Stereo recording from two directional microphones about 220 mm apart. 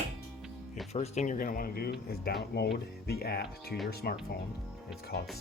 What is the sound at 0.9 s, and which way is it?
Speech, 30° left (ahead or behind).